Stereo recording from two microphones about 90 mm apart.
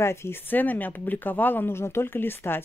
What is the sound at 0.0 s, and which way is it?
Speech, 30° left (ahead or behind).